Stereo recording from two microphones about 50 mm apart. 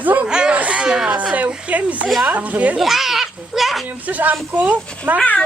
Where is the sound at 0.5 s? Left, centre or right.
Right.